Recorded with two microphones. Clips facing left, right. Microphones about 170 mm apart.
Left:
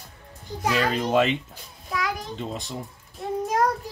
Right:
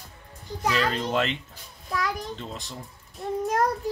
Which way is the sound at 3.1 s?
Centre (ahead or behind).